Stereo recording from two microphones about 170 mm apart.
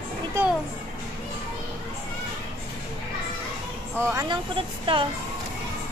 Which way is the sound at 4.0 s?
15° right (ahead or behind).